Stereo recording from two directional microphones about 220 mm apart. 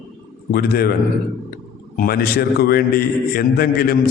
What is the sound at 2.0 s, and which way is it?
A man's voice, 45° left (ahead or behind).